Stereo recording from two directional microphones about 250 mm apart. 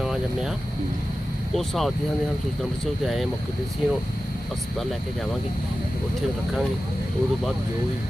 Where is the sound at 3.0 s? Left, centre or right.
Centre.